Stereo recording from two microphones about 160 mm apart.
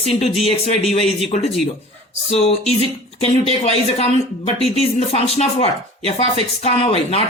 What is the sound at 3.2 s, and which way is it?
Speech, 40° left (ahead or behind).